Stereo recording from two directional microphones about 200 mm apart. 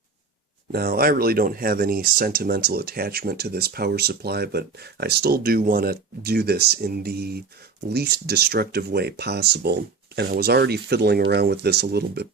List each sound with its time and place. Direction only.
0.7 s speech: 50° right (ahead or behind)